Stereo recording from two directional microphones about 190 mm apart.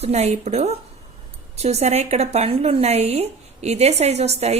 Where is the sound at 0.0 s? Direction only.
35° right (ahead or behind).